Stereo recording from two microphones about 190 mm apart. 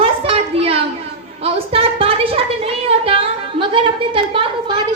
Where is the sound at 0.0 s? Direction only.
30° right (ahead or behind).